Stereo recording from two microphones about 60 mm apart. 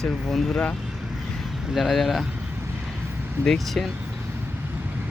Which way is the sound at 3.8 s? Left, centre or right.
Centre.